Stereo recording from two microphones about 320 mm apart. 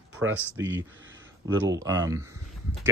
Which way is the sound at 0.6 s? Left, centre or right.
Right.